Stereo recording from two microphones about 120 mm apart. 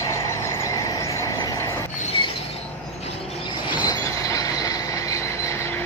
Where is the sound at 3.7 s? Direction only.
40° left (ahead or behind).